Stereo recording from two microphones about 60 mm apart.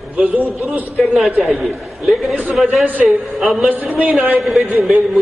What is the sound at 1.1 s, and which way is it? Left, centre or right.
A man's voice, centre.